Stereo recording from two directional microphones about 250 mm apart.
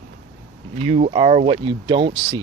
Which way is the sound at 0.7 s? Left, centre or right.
Right.